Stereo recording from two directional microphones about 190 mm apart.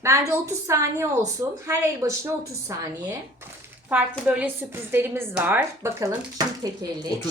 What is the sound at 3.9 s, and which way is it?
Speech, 5° right (ahead or behind).